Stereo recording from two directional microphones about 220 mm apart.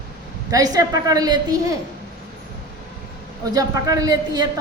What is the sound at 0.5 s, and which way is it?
A woman's voice, 15° right (ahead or behind).